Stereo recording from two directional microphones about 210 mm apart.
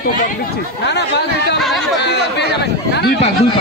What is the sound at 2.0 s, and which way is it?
Speech, 55° left (ahead or behind).